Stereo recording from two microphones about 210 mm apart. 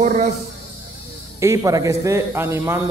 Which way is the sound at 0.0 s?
35° right (ahead or behind).